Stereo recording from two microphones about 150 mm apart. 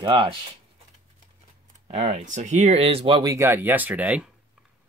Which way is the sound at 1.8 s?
50° right (ahead or behind).